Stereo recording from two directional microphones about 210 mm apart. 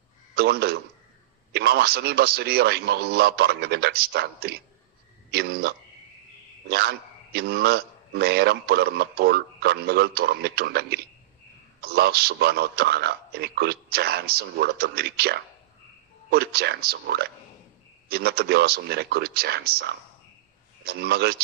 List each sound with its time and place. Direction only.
0.3 s a man's voice: 50° right (ahead or behind)